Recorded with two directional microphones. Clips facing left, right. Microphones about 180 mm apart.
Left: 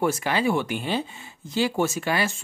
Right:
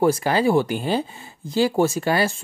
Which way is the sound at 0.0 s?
35° right (ahead or behind).